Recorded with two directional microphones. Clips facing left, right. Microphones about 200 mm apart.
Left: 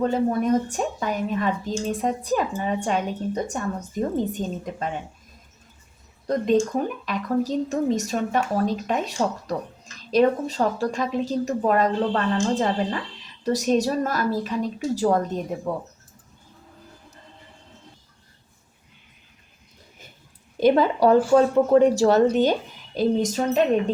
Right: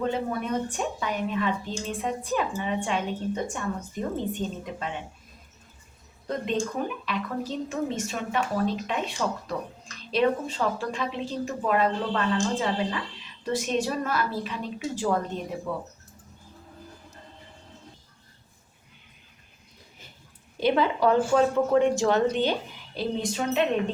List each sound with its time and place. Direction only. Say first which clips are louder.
0.0 s speech: left 6 dB; 40° left (ahead or behind)
6.2 s speech: left 8 dB; 40° left (ahead or behind)
20.6 s speech: left 5 dB; 45° left (ahead or behind)